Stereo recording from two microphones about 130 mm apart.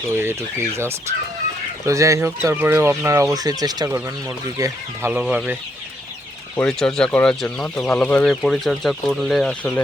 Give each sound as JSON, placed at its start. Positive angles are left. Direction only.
{"t": 0.1, "sound": "speech", "side_deg": -20}
{"t": 5.3, "sound": "speech", "side_deg": -10}
{"t": 6.6, "sound": "speech", "side_deg": 5}